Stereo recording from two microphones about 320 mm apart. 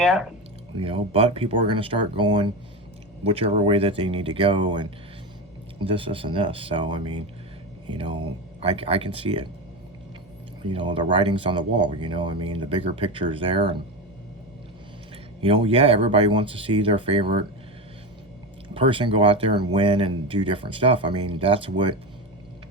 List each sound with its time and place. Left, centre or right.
0.0 s speech: centre
0.8 s speech: centre
10.6 s speech: centre
15.4 s speech: centre
18.7 s speech: centre